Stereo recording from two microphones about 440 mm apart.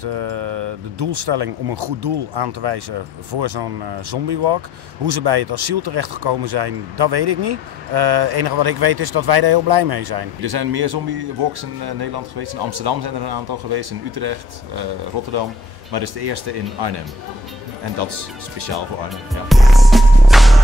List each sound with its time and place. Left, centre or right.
0.0 s speech: right
15.9 s speech: right
19.5 s music: centre